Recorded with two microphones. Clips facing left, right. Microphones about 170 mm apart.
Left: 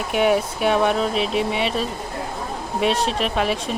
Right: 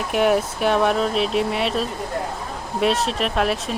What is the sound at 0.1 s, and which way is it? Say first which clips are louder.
Speech: even; centre (ahead or behind).